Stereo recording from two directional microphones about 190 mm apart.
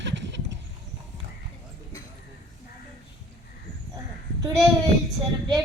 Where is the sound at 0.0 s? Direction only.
65° right (ahead or behind).